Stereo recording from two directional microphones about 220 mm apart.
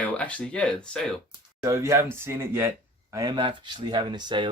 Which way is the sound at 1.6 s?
15° right (ahead or behind).